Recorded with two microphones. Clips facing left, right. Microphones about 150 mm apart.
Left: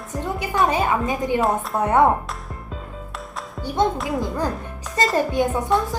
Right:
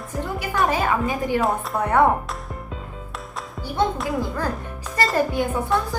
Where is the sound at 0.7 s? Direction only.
20° left (ahead or behind).